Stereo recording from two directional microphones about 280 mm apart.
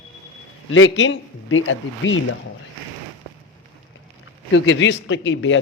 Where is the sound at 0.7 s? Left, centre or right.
Left.